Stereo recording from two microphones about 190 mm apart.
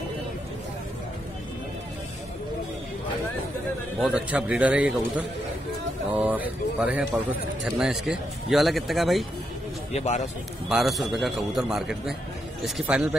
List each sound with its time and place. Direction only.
4.0 s a man's voice: 5° right (ahead or behind)
9.9 s speech: 35° left (ahead or behind)
10.7 s a man's voice: centre (ahead or behind)